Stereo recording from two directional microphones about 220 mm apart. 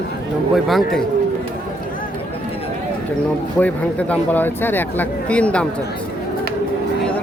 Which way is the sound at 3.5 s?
5° left (ahead or behind).